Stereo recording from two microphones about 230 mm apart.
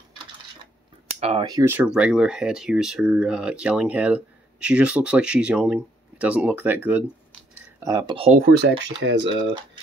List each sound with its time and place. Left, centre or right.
1.0 s speech: right; by 7.1 s centre
7.8 s speech: centre
8.3 s speech: right
9.3 s speech: centre